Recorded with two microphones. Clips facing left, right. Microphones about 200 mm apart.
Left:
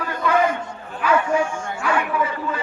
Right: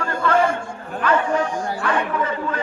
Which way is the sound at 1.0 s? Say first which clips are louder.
Even; 10° left (ahead or behind).